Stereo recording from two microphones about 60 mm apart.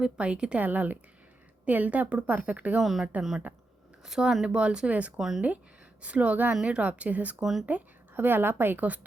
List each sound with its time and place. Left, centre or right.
0.0 s speech: centre
0.6 s a woman's voice: right
2.8 s speech: centre
3.5 s speech: right
4.0 s speech: centre
5.1 s speech: centre
6.0 s a woman's voice: right